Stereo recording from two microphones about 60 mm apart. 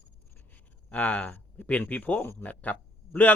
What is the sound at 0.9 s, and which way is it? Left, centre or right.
A man's voice, left.